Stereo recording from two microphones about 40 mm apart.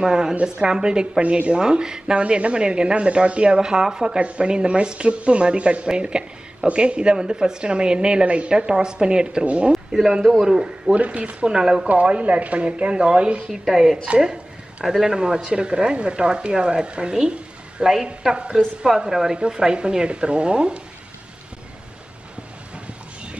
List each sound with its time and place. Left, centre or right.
0.0 s speech: centre
9.7 s speech: centre
10.4 s speech: centre
11.1 s speech: right
11.5 s speech: centre
11.9 s speech: right
13.5 s speech: centre
14.2 s a sound: right
14.9 s speech: centre
15.1 s speech: right
19.0 s speech: centre